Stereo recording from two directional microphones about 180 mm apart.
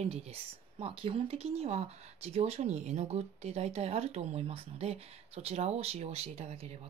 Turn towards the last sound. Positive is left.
turn(degrees=-35)  # may be behind; listen again after turning